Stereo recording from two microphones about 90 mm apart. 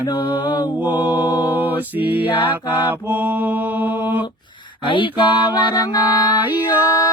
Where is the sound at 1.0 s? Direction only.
20° right (ahead or behind).